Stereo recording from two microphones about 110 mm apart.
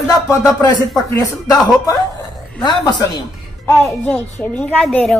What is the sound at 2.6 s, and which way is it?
Speech, 40° left (ahead or behind).